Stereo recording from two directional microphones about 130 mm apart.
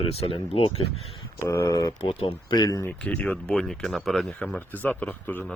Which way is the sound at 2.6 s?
25° left (ahead or behind).